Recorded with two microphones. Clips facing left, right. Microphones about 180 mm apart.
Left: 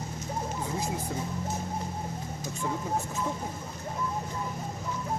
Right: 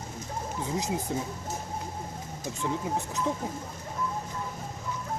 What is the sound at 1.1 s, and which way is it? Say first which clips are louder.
Speech: right 3 dB; 25° right (ahead or behind).